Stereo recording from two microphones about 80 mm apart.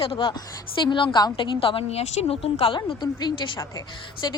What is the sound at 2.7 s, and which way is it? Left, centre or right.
Speech, left.